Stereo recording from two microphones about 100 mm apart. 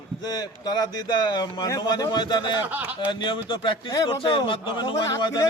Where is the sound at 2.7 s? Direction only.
15° right (ahead or behind).